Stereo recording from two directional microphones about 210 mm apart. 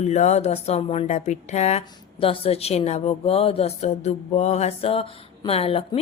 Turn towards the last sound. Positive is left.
turn(degrees=25)  # may be behind; listen again after turning